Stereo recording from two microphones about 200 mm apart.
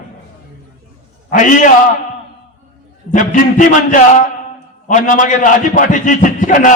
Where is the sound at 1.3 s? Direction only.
40° left (ahead or behind).